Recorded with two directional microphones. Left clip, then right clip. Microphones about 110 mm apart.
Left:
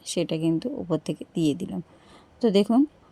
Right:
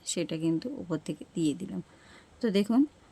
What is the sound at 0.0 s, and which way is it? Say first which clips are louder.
A woman's voice: left 5 dB; 30° left (ahead or behind).